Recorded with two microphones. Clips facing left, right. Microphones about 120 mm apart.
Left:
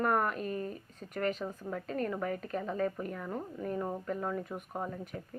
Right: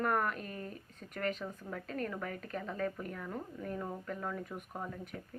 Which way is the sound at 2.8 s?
25° left (ahead or behind).